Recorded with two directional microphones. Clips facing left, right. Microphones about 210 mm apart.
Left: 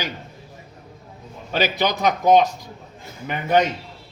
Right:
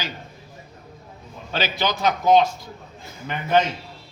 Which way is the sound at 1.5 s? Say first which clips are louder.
Left 3 dB; 15° left (ahead or behind).